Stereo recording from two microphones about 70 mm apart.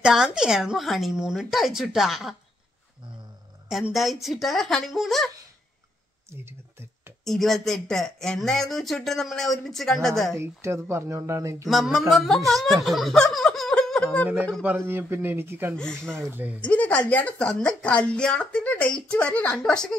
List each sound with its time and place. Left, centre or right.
0.0 s speech: centre
3.9 s speech: centre
7.2 s speech: centre
10.3 s speech: right
11.7 s speech: centre
14.9 s speech: right
15.7 s speech: centre
16.2 s speech: right
16.6 s a woman's voice: centre